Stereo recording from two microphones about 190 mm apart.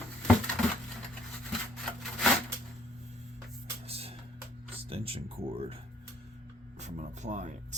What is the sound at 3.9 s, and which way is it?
Music, 30° right (ahead or behind).